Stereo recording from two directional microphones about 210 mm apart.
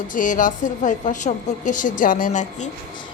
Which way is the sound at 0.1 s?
40° left (ahead or behind).